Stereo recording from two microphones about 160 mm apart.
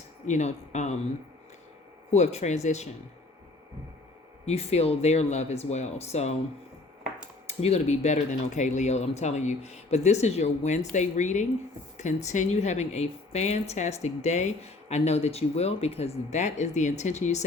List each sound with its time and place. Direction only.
0.3 s speech: 45° left (ahead or behind)
2.0 s speech: 45° left (ahead or behind)
4.4 s speech: 40° left (ahead or behind)
7.4 s speech: 40° left (ahead or behind)